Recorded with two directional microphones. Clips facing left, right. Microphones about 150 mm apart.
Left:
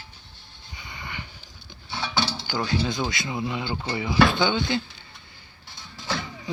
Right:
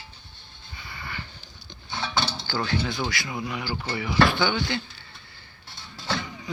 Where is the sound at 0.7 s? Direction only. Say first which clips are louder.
Even; 20° left (ahead or behind).